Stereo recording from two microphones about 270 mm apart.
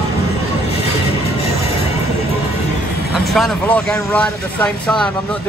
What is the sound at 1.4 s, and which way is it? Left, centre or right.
Music, left.